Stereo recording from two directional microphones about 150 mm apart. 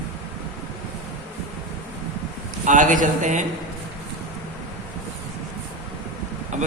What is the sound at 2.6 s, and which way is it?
Speech, 60° right (ahead or behind).